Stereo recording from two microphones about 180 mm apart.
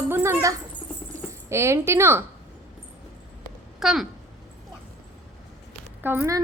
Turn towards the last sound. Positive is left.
turn(degrees=-15)  # may be behind; listen again after turning